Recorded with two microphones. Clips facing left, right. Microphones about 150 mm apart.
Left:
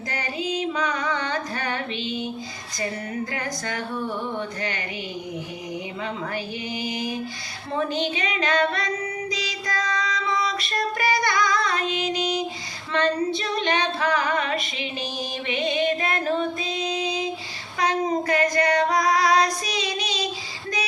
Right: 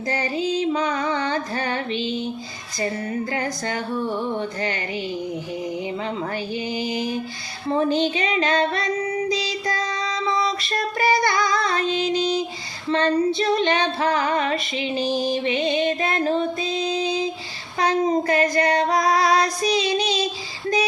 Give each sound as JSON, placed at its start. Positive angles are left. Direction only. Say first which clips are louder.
{"t": 0.1, "sound": "music", "louder": "right 5 dB", "side_deg": -30}
{"t": 6.7, "sound": "female singing", "louder": "right 2 dB", "side_deg": -30}
{"t": 9.3, "sound": "child singing", "louder": "right 4 dB", "side_deg": -30}
{"t": 12.9, "sound": "female singing", "louder": "right 3 dB", "side_deg": -30}